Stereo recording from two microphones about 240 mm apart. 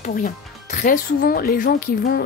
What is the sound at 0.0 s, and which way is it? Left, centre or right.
A woman's voice, left.